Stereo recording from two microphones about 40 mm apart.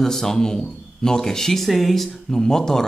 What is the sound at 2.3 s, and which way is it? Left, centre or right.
Speech, centre.